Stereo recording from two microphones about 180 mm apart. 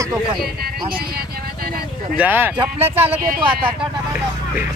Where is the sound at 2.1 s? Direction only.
10° right (ahead or behind).